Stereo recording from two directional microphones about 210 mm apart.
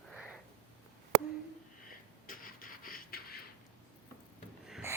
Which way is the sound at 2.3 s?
40° left (ahead or behind).